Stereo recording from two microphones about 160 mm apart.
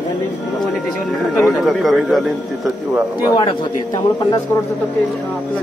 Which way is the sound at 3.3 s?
30° left (ahead or behind).